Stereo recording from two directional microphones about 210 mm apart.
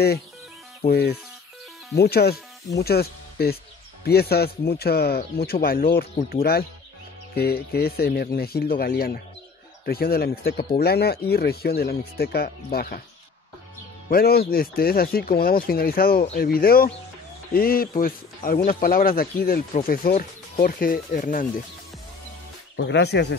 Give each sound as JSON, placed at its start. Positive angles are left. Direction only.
{"t": 0.8, "sound": "speech", "side_deg": 50}
{"t": 14.1, "sound": "speech", "side_deg": 45}
{"t": 22.8, "sound": "speech", "side_deg": 55}